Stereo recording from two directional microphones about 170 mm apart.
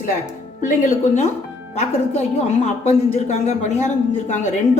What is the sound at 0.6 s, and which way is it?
A woman's voice, 50° left (ahead or behind).